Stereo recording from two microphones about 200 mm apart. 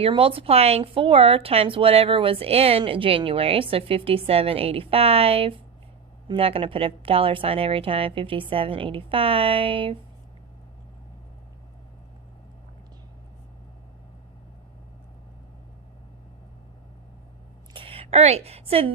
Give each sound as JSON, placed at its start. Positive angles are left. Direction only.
{"t": 0.0, "sound": "a woman's voice", "side_deg": -25}
{"t": 17.7, "sound": "a woman's voice", "side_deg": -30}